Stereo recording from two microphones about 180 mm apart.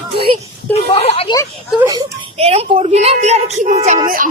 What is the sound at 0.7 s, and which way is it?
Speech, 35° left (ahead or behind).